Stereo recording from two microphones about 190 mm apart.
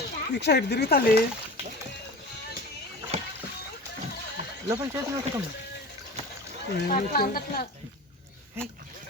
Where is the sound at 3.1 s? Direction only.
30° right (ahead or behind).